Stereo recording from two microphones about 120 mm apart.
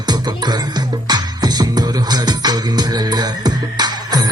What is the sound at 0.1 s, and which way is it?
Music, 35° right (ahead or behind).